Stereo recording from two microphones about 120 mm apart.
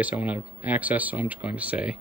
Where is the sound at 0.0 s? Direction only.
10° right (ahead or behind).